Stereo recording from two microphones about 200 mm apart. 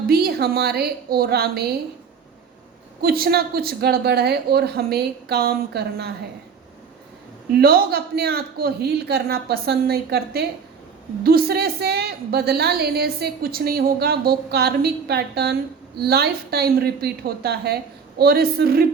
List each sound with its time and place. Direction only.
0.1 s a woman's voice: 50° right (ahead or behind)
3.0 s a woman's voice: 50° right (ahead or behind)
7.5 s a woman's voice: 50° right (ahead or behind)